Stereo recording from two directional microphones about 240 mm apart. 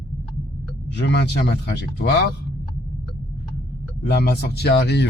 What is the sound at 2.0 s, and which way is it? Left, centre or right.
Speech, left.